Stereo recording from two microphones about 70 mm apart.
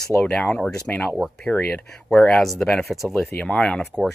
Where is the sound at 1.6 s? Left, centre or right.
Left.